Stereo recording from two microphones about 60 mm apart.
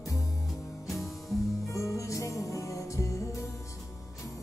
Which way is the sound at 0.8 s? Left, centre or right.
Centre.